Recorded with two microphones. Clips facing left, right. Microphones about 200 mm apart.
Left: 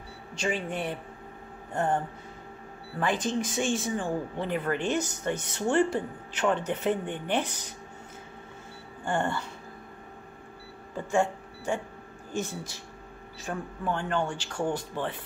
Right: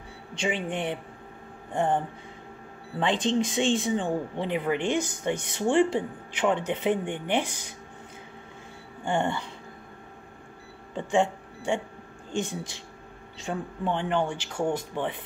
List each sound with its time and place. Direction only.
0.5 s speech: 15° right (ahead or behind)
9.0 s speech: 20° right (ahead or behind)
11.0 s speech: 25° right (ahead or behind)
13.5 s speech: 20° right (ahead or behind)